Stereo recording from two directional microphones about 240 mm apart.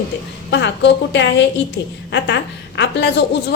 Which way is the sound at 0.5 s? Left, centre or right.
Left.